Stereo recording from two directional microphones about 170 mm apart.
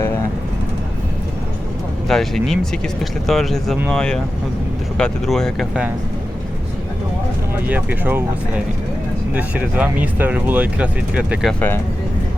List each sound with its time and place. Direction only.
2.0 s speech: centre (ahead or behind)
7.7 s speech: 10° right (ahead or behind)
9.3 s speech: 10° right (ahead or behind)